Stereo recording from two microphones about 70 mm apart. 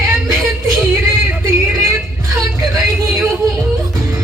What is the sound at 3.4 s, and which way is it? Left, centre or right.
Music, right.